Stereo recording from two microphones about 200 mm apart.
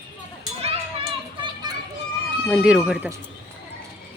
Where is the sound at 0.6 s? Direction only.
25° right (ahead or behind).